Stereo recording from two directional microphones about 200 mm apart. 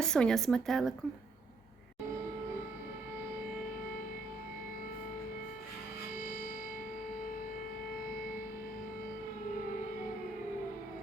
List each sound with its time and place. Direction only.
0.0 s a woman's voice: 5° left (ahead or behind)
6.1 s music: 45° left (ahead or behind)